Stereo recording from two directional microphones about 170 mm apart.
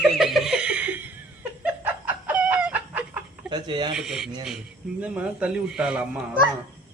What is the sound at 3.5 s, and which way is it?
Speech, 25° right (ahead or behind).